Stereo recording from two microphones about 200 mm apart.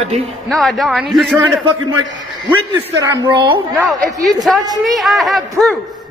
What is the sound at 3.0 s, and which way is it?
Speech, 20° right (ahead or behind).